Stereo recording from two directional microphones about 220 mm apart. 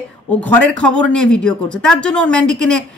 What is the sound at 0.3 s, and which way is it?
Speech, 5° left (ahead or behind).